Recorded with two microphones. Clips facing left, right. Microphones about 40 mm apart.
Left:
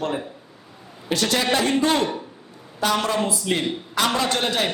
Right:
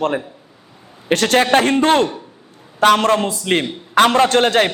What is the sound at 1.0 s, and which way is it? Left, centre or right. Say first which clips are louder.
A man's voice: right 7 dB; right.